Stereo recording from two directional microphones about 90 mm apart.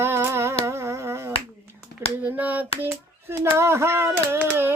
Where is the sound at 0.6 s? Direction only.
35° right (ahead or behind).